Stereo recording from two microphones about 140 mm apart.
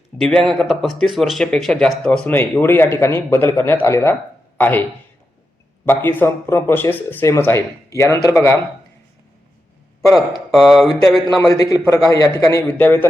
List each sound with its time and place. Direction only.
0.2 s speech: centre (ahead or behind); by 8.4 s 20° left (ahead or behind)
10.1 s a man's voice: 25° left (ahead or behind)
10.5 s speech: centre (ahead or behind)
11.3 s a man's voice: 25° left (ahead or behind)
12.6 s speech: 10° left (ahead or behind)